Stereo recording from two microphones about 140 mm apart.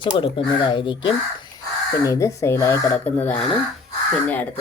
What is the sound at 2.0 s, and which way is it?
A woman's voice, 25° left (ahead or behind).